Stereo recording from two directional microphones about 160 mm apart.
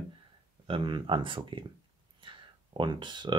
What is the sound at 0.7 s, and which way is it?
Speech, 30° right (ahead or behind).